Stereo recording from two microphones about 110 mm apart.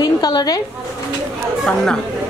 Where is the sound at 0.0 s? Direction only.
40° left (ahead or behind).